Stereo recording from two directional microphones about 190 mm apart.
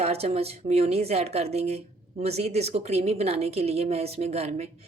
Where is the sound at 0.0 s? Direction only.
35° right (ahead or behind).